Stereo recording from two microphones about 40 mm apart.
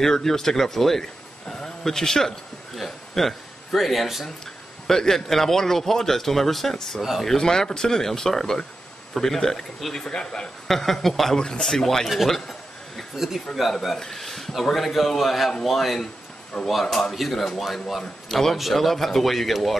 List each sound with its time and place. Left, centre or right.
0.0 s a man's voice: centre
1.5 s a sound: centre
4.8 s a man's voice: centre
7.0 s a man's voice: centre
7.2 s a man's voice: centre
9.9 s speech: left
10.7 s a man's voice: centre
12.1 s a sound: centre
13.8 s a man's voice: centre